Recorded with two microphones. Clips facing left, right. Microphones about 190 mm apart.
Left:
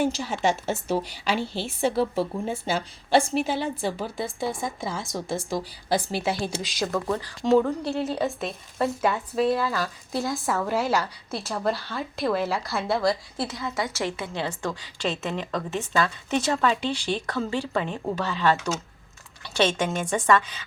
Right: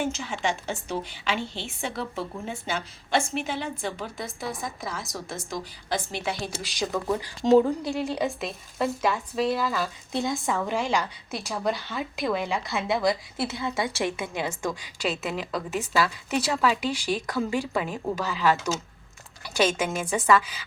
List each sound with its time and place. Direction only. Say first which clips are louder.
0.0 s a woman's voice: left 4 dB; 35° left (ahead or behind)
7.1 s a woman's voice: right 2 dB; 15° right (ahead or behind)
8.4 s speech: left 1 dB; centre (ahead or behind)
13.5 s a woman's voice: right 1 dB; 25° right (ahead or behind); by 20.6 s 5° right (ahead or behind)